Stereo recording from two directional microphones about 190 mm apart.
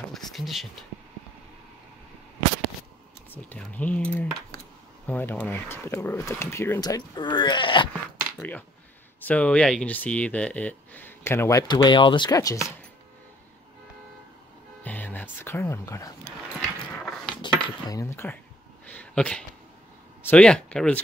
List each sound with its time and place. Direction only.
0.1 s speech: centre (ahead or behind)
3.4 s speech: 10° left (ahead or behind); by 7.9 s 25° left (ahead or behind)
8.4 s speech: 10° left (ahead or behind)
14.8 s music: 10° left (ahead or behind)
16.9 s a sound: 5° left (ahead or behind)
17.4 s speech: 20° left (ahead or behind)
18.9 s a sound: 5° left (ahead or behind)
20.2 s speech: 5° left (ahead or behind)